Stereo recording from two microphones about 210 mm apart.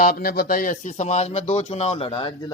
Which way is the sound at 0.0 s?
45° left (ahead or behind).